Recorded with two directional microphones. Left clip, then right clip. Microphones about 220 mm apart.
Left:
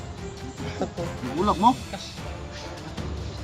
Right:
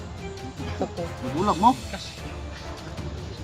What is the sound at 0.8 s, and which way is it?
Music, 15° left (ahead or behind).